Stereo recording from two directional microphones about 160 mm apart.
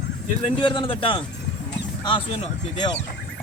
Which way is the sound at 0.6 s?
30° left (ahead or behind).